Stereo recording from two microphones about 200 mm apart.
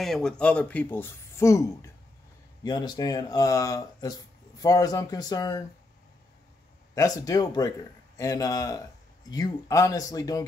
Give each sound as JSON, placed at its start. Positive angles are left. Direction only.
{"t": 0.0, "sound": "speech", "side_deg": 0}
{"t": 7.0, "sound": "speech", "side_deg": 15}